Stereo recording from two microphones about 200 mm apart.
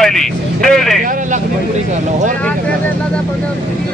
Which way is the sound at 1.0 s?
45° right (ahead or behind).